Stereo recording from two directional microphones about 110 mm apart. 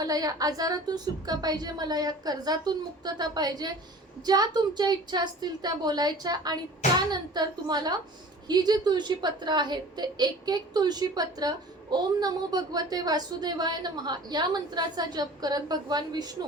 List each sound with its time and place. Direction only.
0.0 s a woman's voice: 35° right (ahead or behind)